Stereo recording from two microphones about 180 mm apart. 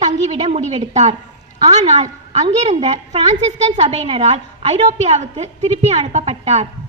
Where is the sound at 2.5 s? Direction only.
40° right (ahead or behind).